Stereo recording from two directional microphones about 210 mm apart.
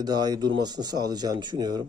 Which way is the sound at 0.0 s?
20° right (ahead or behind).